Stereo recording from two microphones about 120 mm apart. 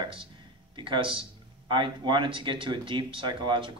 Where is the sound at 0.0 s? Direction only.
45° right (ahead or behind).